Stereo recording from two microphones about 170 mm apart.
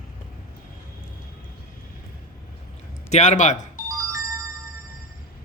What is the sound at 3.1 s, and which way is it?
Speech, 45° left (ahead or behind).